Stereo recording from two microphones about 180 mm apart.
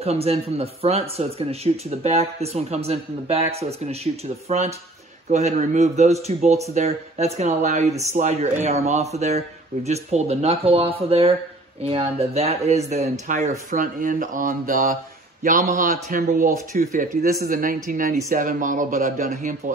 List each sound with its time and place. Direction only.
0.0 s a man's voice: 35° right (ahead or behind)